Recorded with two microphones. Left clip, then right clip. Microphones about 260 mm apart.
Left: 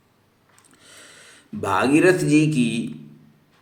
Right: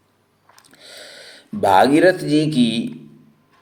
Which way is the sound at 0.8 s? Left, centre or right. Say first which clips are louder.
Right 8 dB; centre.